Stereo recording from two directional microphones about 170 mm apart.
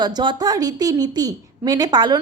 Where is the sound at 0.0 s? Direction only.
25° right (ahead or behind).